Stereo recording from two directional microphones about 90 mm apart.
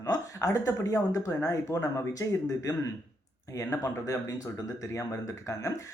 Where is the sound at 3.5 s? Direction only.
35° left (ahead or behind).